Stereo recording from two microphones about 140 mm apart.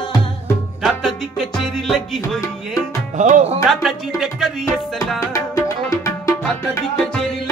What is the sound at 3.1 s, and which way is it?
Speech, 65° right (ahead or behind).